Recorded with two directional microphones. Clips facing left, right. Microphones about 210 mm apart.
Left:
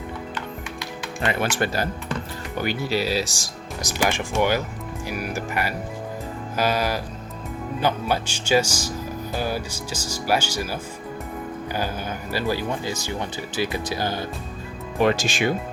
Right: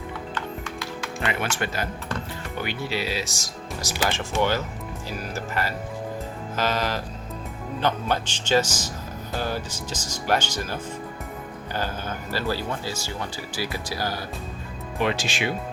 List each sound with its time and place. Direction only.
0.3 s music: 20° left (ahead or behind)
1.3 s speech: 35° left (ahead or behind)
3.8 s speech: 15° left (ahead or behind)
15.0 s speech: 45° left (ahead or behind)